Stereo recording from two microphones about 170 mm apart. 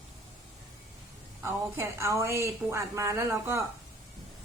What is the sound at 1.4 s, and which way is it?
A woman's voice, 15° right (ahead or behind).